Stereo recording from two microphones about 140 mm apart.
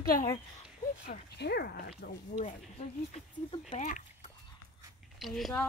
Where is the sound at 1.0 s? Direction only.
80° left.